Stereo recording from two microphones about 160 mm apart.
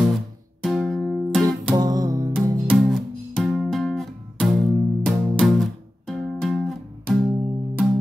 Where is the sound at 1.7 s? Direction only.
25° right (ahead or behind).